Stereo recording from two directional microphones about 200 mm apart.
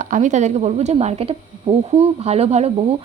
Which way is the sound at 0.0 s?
40° right (ahead or behind).